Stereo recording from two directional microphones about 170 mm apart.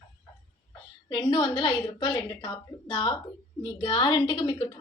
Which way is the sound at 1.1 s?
25° left (ahead or behind).